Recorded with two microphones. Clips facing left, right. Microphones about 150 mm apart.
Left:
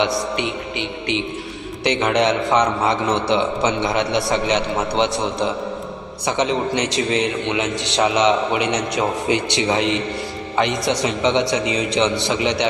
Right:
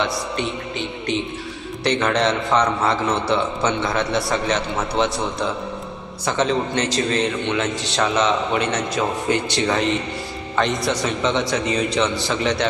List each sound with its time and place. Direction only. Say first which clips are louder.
0.8 s a man's voice: even; 70° left (ahead or behind)
1.8 s a man's voice: left 1 dB; 15° left (ahead or behind)